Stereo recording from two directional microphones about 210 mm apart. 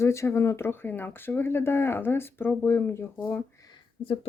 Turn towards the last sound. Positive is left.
turn(degrees=25)  # may be behind; listen again after turning